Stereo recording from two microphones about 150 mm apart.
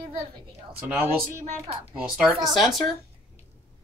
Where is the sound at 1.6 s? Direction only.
45° right (ahead or behind).